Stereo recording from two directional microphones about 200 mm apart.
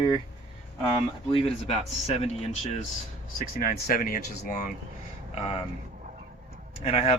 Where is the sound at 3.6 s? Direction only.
45° left (ahead or behind).